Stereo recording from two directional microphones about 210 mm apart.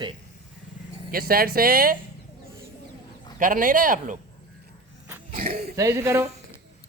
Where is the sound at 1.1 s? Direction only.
45° right (ahead or behind).